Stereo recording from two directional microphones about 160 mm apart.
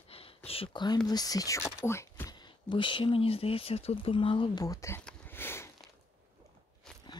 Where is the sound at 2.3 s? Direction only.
30° left (ahead or behind).